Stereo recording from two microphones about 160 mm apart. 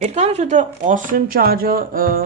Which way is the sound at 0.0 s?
45° right (ahead or behind).